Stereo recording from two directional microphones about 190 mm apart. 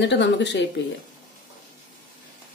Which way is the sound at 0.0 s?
65° left (ahead or behind).